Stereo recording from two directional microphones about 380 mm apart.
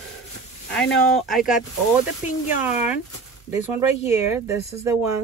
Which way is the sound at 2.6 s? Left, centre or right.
Centre.